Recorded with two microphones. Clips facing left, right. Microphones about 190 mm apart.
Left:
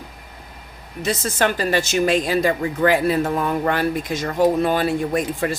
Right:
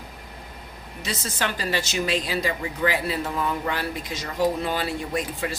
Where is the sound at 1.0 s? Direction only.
50° left (ahead or behind).